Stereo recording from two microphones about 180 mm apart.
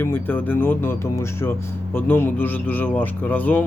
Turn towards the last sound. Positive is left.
turn(degrees=10)  # may be behind; listen again after turning